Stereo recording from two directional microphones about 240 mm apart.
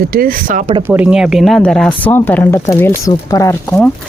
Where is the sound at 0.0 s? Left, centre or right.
Right.